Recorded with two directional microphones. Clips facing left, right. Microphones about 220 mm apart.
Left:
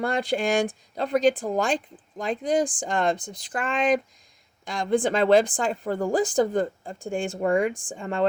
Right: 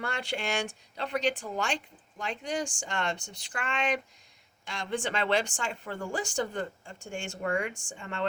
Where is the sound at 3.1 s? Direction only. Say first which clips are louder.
Left 8 dB; 90° left.